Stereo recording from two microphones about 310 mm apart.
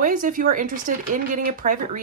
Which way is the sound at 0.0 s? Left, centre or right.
Right.